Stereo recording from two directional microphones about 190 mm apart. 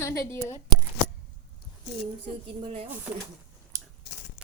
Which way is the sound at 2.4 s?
30° right (ahead or behind).